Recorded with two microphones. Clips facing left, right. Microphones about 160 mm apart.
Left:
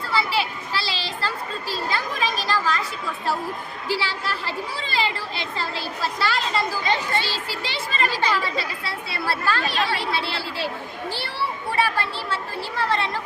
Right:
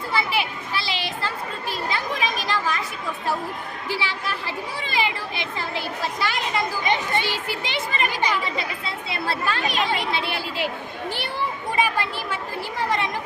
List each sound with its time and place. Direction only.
0.1 s children playing: 20° right (ahead or behind)
3.8 s speech: 20° right (ahead or behind)
11.8 s speech: 15° right (ahead or behind)